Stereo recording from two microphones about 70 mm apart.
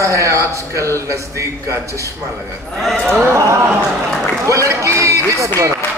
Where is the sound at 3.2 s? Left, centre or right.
Right.